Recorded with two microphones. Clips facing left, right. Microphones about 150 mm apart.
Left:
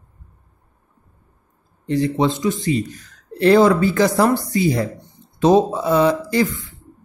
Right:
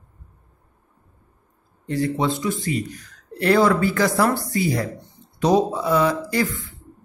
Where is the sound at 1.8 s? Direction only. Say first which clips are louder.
Left 4 dB; 20° left (ahead or behind).